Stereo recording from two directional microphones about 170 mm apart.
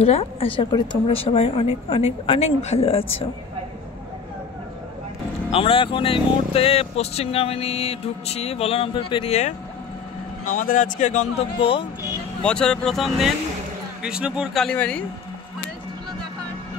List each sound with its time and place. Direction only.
0.0 s speech: 35° left (ahead or behind)
5.5 s speech: 35° left (ahead or behind)
10.4 s speech: 50° left (ahead or behind); by 11.8 s 35° left (ahead or behind)
12.4 s speech: 5° left (ahead or behind)